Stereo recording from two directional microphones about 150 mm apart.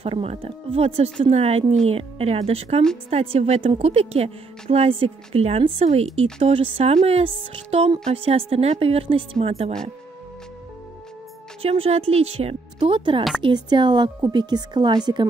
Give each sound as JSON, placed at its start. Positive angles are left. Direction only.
{"t": 0.0, "sound": "a woman's voice", "side_deg": -40}
{"t": 11.6, "sound": "a woman's voice", "side_deg": -40}